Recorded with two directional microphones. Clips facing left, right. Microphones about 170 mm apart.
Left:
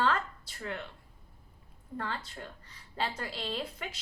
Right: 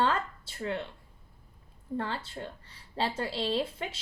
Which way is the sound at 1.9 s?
30° right (ahead or behind).